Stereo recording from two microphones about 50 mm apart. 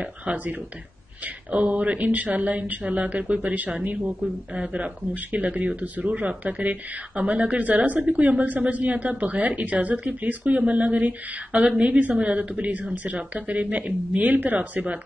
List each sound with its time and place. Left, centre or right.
0.0 s speech: right
11.5 s speech: centre